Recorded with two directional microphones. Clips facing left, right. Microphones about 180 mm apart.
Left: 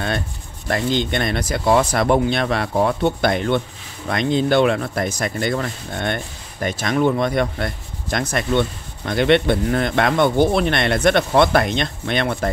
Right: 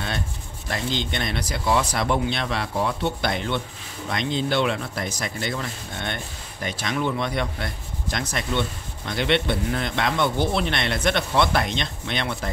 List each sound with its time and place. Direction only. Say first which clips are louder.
0.7 s speech: left 7 dB; 55° left (ahead or behind)